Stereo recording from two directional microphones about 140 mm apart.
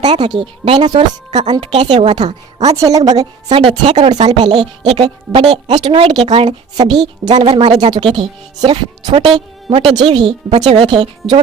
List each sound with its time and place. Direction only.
0.0 s speech: 30° right (ahead or behind)
1.9 s a woman's voice: 50° right (ahead or behind)
2.2 s a woman's voice: 25° right (ahead or behind)
3.5 s speech: 40° right (ahead or behind)
4.2 s speech: 35° right (ahead or behind)